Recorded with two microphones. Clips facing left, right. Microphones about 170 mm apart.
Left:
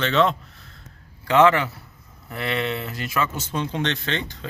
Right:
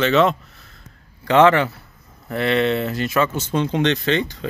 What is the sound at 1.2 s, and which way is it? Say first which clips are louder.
Speech: right 3 dB; 25° right (ahead or behind).